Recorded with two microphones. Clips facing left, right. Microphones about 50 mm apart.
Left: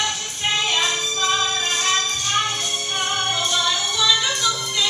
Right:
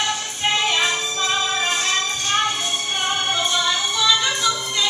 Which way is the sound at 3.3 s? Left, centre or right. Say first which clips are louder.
Right 1 dB; centre.